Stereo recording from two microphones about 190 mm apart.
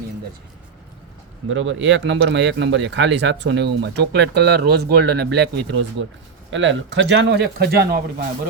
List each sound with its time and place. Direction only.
1.5 s speech: 85° right; by 6.1 s 60° right (ahead or behind)
6.5 s speech: 80° right; by 8.0 s 55° right (ahead or behind)